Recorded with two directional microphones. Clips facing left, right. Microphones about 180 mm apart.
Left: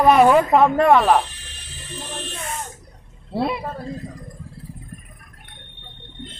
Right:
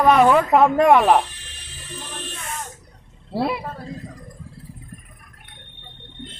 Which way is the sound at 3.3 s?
5° right (ahead or behind).